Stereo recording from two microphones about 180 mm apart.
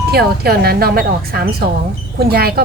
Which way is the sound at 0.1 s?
60° right (ahead or behind).